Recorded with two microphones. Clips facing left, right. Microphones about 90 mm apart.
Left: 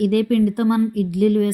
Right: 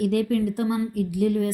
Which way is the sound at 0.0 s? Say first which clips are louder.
Left 5 dB; 60° left (ahead or behind).